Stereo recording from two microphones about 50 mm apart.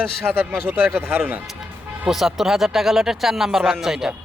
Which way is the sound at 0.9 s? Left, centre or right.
Right.